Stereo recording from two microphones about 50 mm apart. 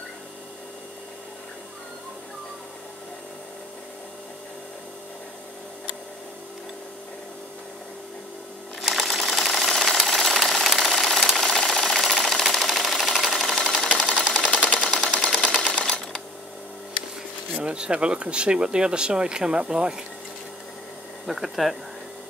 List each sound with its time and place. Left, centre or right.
8.8 s sewing machine: centre
14.9 s camera: centre
17.6 s speech: right
21.3 s speech: centre